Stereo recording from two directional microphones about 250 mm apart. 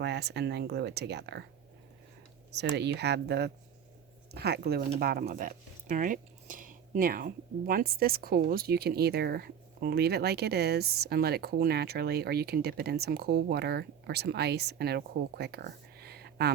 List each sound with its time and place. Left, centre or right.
0.0 s speech: right
2.5 s speech: right